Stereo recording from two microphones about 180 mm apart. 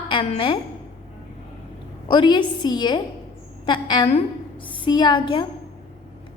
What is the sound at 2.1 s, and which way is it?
A woman's voice, 25° left (ahead or behind).